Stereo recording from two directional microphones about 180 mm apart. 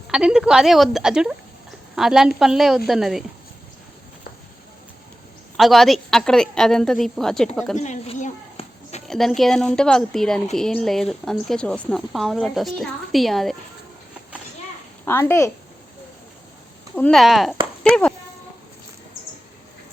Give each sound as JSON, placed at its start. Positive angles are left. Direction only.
{"t": 0.1, "sound": "a woman's voice", "side_deg": -5}
{"t": 5.5, "sound": "a woman's voice", "side_deg": 0}
{"t": 7.8, "sound": "a sound", "side_deg": 40}
{"t": 9.0, "sound": "a woman's voice", "side_deg": 0}
{"t": 15.0, "sound": "a woman's voice", "side_deg": 15}
{"t": 16.9, "sound": "a woman's voice", "side_deg": 5}